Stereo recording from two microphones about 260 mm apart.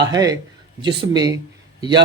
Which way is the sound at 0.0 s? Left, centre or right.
Centre.